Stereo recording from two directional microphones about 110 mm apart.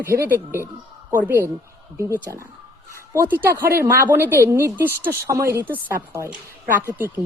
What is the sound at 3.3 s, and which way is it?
A woman's voice, 20° right (ahead or behind).